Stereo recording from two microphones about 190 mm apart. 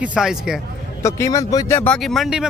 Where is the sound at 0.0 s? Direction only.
5° right (ahead or behind).